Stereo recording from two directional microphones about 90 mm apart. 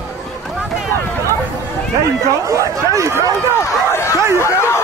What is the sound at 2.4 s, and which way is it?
Chatter, 35° right (ahead or behind).